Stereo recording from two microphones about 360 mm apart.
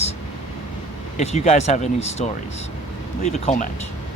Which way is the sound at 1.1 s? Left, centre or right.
Centre.